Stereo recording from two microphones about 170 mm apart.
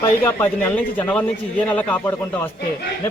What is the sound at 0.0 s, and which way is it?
Speech, 10° left (ahead or behind).